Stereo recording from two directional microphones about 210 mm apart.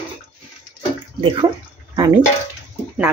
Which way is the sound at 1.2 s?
25° right (ahead or behind).